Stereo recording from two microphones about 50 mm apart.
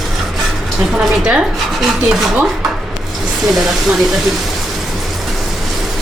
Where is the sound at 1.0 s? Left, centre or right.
Centre.